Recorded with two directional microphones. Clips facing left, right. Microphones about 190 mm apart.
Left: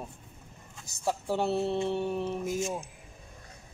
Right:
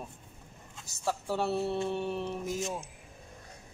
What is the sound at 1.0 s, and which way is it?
Speech, 20° left (ahead or behind).